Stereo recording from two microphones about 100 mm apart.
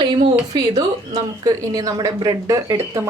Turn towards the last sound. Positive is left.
turn(degrees=-30)  # may be behind; listen again after turning